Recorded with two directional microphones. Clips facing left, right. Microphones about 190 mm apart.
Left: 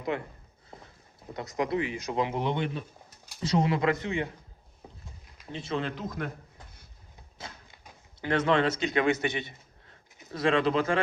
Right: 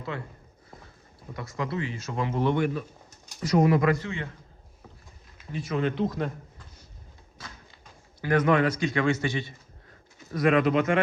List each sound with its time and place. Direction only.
0.1 s speech: 20° left (ahead or behind)
1.3 s speech: 20° left (ahead or behind)
5.5 s speech: 25° left (ahead or behind)
6.1 s speech: 55° left (ahead or behind)
8.2 s speech: 25° left (ahead or behind)